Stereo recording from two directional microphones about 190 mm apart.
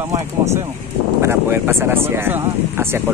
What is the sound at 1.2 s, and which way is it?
Speech, 15° right (ahead or behind).